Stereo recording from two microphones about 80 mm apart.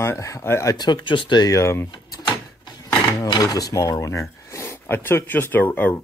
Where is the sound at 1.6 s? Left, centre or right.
Left.